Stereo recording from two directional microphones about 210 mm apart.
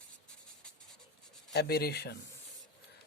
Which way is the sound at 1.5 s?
50° left (ahead or behind).